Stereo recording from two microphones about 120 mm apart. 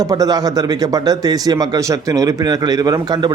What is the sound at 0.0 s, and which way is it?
A man's voice, 30° right (ahead or behind).